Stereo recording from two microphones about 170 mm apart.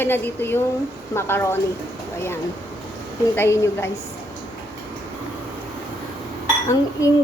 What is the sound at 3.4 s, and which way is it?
Speech, 15° left (ahead or behind).